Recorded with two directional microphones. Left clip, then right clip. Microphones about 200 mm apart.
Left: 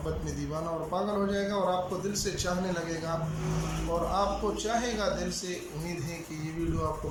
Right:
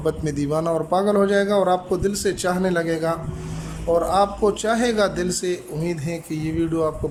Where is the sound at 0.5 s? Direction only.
50° right (ahead or behind).